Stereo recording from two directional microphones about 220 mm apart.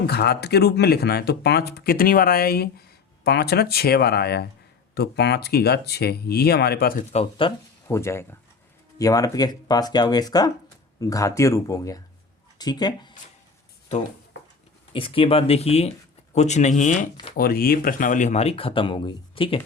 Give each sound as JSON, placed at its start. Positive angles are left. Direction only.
{"t": 0.1, "sound": "speech", "side_deg": 45}
{"t": 7.1, "sound": "speech", "side_deg": 25}
{"t": 7.9, "sound": "speech", "side_deg": 10}
{"t": 14.9, "sound": "speech", "side_deg": 25}